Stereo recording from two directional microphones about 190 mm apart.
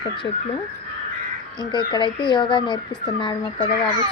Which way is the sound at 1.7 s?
25° left (ahead or behind).